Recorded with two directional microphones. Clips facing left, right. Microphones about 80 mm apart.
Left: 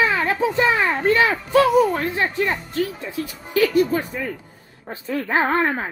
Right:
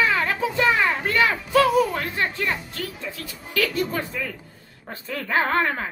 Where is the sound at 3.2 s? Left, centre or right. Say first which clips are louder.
Left 6 dB; centre.